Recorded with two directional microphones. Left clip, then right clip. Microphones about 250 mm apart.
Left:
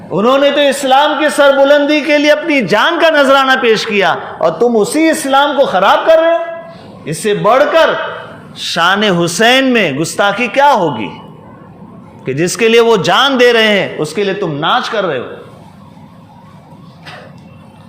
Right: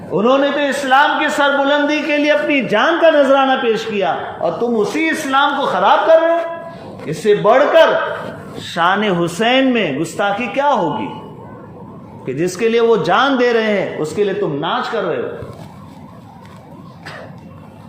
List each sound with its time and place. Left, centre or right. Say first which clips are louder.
0.1 s a man's voice: left 4 dB; left
12.2 s a man's voice: left 5 dB; left